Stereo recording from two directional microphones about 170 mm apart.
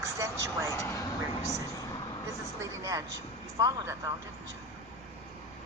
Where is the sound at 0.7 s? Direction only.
15° left (ahead or behind).